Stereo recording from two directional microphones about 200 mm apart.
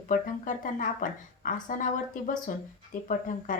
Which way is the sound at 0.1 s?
40° left (ahead or behind).